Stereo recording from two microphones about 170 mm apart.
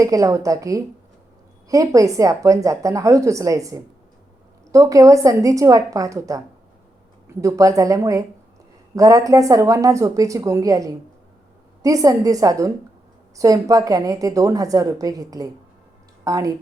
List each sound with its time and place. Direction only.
0.0 s a woman's voice: 20° right (ahead or behind)
7.4 s a woman's voice: 20° right (ahead or behind)